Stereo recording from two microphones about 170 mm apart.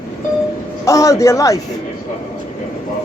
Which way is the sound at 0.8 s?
20° left (ahead or behind).